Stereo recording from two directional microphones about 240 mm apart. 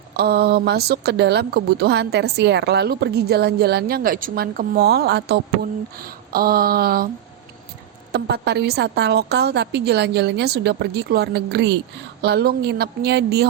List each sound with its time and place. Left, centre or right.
0.2 s speech: right
8.1 s speech: right